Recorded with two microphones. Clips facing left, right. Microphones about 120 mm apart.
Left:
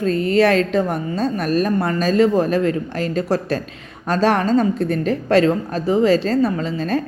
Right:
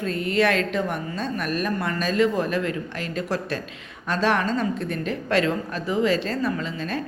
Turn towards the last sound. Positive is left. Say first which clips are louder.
# left 6 dB
turn(degrees=35)  # may be behind; listen again after turning